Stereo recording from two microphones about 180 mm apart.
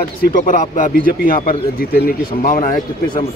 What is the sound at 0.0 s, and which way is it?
Speech, 50° left (ahead or behind).